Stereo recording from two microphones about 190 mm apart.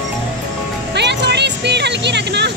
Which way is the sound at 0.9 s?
65° right (ahead or behind).